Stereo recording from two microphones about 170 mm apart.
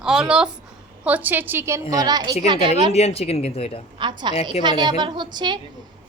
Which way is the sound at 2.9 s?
40° left (ahead or behind).